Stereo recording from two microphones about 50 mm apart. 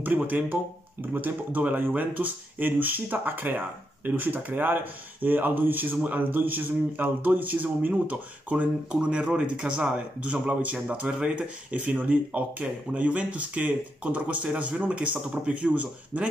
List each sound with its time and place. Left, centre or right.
0.0 s speech: right
9.0 s speech: centre